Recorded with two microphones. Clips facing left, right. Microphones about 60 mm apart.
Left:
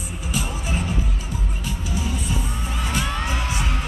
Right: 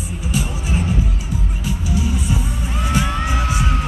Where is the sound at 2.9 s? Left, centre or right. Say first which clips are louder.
Right 5 dB; centre.